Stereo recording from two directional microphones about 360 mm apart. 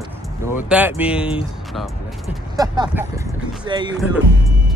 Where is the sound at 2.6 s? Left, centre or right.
Centre.